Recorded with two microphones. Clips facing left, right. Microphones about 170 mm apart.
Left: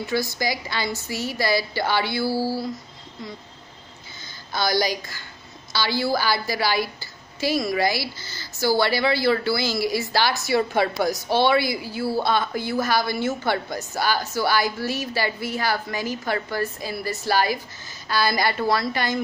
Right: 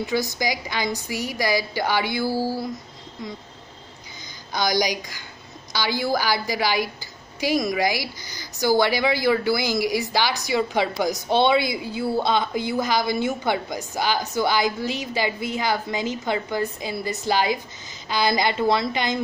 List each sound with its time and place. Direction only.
0.0 s a woman's voice: 20° right (ahead or behind)
4.5 s a woman's voice: 15° right (ahead or behind)